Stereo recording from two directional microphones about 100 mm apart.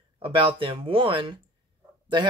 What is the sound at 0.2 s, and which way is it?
Speech, 55° right (ahead or behind).